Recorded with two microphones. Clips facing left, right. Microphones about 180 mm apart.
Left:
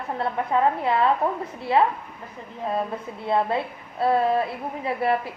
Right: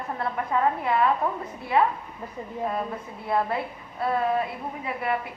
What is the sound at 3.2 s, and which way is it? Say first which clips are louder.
A woman's voice: left 3 dB; 25° left (ahead or behind).